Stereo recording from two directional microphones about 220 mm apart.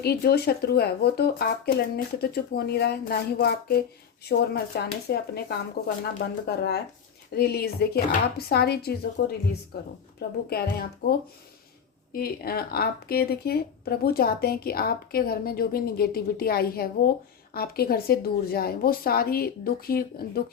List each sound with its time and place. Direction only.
0.0 s speech: 45° left (ahead or behind)
12.1 s speech: 45° left (ahead or behind)